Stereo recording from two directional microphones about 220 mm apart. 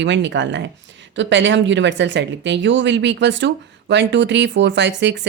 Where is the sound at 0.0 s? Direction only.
55° right (ahead or behind).